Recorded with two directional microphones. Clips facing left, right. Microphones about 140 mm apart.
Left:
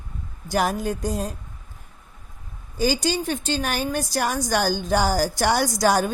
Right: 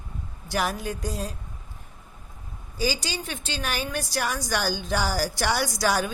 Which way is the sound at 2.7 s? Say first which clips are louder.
Left 6 dB; 50° left (ahead or behind).